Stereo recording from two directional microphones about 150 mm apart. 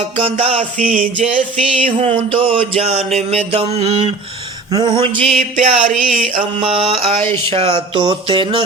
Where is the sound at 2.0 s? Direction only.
35° right (ahead or behind).